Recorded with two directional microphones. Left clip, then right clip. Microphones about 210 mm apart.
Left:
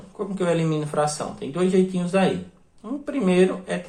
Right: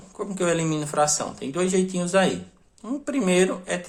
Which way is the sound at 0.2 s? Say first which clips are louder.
Left 1 dB; 25° right (ahead or behind).